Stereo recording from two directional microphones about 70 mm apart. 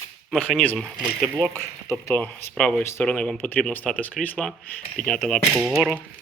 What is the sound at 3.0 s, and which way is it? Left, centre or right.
Speech, centre.